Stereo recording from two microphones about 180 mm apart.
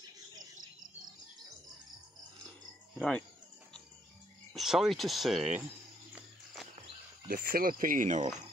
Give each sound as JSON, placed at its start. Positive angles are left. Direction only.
{"t": 3.0, "sound": "speech", "side_deg": 5}
{"t": 4.6, "sound": "speech", "side_deg": 0}
{"t": 6.1, "sound": "music", "side_deg": 0}
{"t": 7.2, "sound": "speech", "side_deg": -50}